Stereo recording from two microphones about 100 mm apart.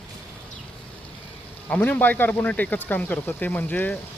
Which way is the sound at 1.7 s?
15° left (ahead or behind).